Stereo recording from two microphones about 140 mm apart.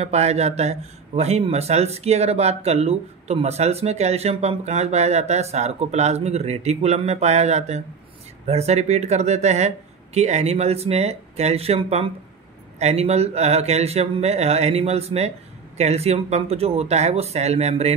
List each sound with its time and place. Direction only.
0.0 s speech: 50° right (ahead or behind)